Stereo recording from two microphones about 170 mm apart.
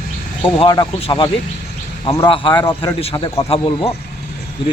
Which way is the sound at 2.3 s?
30° left (ahead or behind).